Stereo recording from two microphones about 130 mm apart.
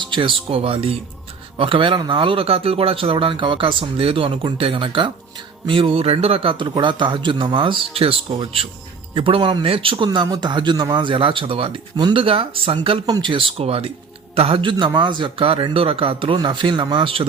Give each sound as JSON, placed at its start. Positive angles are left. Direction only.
{"t": 0.0, "sound": "a man's voice", "side_deg": -40}